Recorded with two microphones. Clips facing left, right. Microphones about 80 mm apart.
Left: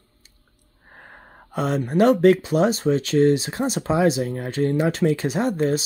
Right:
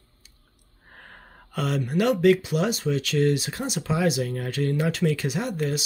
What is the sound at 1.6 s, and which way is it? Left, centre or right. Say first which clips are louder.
Speech: left 5 dB; left.